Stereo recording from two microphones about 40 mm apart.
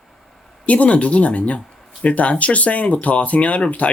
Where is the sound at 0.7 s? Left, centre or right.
Left.